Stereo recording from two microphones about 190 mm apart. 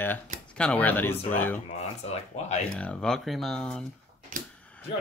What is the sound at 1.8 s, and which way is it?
Speech, 35° left (ahead or behind).